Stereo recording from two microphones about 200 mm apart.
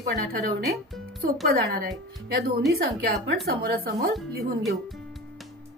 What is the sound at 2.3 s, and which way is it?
A woman's voice, 50° right (ahead or behind).